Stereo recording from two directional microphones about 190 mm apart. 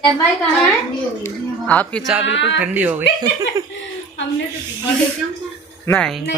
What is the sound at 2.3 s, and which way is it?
Speech, 70° left (ahead or behind).